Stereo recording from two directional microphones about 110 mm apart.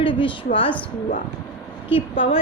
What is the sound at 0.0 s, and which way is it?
Speech, 50° left (ahead or behind).